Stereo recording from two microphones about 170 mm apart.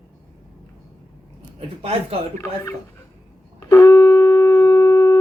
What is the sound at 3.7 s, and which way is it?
Wind instrument, 20° left (ahead or behind).